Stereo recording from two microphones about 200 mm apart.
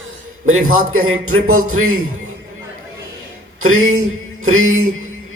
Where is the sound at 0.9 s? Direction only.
90° right.